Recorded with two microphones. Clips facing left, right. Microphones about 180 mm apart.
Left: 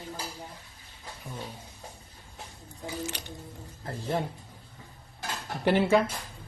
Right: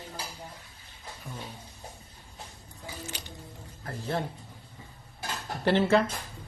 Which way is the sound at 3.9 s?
15° left (ahead or behind).